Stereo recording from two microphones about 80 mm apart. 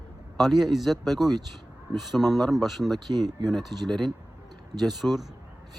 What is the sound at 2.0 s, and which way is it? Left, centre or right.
Speech, centre.